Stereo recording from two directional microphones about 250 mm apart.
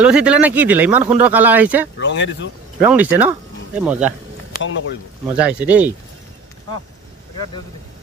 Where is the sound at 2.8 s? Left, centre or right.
Centre.